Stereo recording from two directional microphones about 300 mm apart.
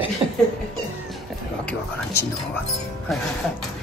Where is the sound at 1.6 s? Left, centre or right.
Centre.